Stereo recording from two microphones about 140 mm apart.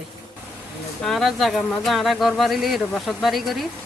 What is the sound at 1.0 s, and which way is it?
Speech, centre (ahead or behind).